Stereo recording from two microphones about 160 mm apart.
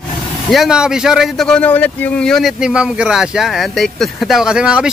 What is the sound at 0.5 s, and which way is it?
Speech, 5° right (ahead or behind).